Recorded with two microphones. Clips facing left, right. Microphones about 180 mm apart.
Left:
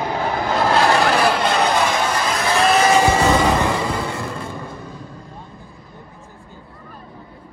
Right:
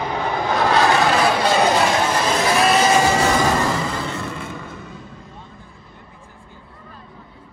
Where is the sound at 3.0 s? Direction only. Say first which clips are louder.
Left 2 dB; 15° left (ahead or behind).